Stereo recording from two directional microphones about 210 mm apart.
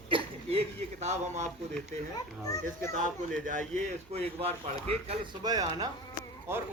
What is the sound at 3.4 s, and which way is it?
Speech, 35° right (ahead or behind).